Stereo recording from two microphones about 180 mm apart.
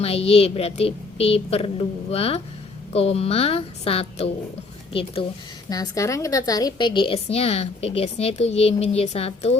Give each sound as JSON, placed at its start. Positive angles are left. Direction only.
{"t": 0.0, "sound": "a woman's voice", "side_deg": 35}